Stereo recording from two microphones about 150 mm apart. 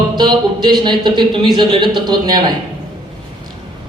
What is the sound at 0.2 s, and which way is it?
A man's voice, 30° right (ahead or behind).